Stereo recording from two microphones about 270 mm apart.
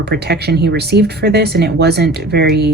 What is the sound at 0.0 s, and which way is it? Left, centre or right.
Speech, right.